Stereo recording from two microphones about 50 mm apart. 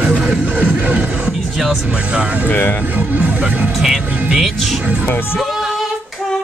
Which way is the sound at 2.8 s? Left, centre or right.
Right.